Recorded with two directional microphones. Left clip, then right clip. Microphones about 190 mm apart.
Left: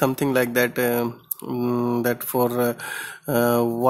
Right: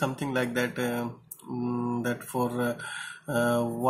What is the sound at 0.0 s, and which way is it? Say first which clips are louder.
Speech: left 8 dB; 55° left (ahead or behind).